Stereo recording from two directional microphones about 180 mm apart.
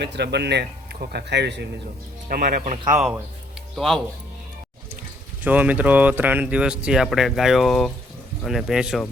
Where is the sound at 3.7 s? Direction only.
Centre (ahead or behind).